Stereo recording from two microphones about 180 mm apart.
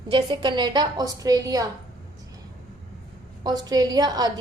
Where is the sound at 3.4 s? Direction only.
20° right (ahead or behind).